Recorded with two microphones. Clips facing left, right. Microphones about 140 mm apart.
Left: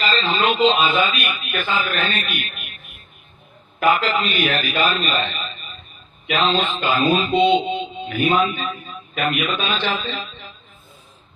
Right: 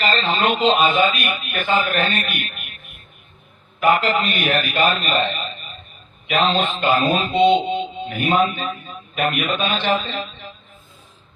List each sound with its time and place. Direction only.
0.0 s speech: 55° right (ahead or behind)
3.9 s a man's voice: 50° right (ahead or behind)